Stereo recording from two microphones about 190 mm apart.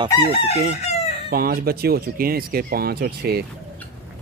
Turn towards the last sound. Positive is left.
turn(degrees=-55)  # may be behind; listen again after turning